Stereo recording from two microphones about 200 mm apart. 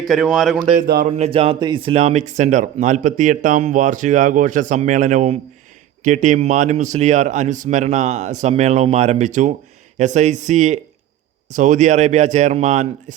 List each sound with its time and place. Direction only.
0.0 s speech: centre (ahead or behind)
0.8 s speech: 50° right (ahead or behind)
1.0 s speech: 35° right (ahead or behind)